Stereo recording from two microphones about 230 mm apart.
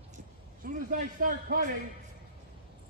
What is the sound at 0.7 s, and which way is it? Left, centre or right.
A man's voice, right.